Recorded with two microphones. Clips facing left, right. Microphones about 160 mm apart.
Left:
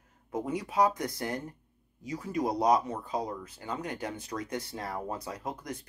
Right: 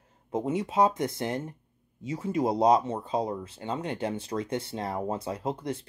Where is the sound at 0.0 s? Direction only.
25° right (ahead or behind).